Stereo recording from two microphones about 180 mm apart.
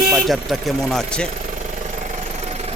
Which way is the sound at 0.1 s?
Centre (ahead or behind).